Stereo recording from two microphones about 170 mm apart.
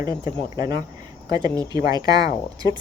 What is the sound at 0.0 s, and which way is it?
Speech, 20° right (ahead or behind).